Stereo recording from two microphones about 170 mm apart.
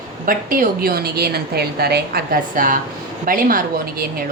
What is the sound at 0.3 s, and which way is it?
A woman's voice, 55° right (ahead or behind).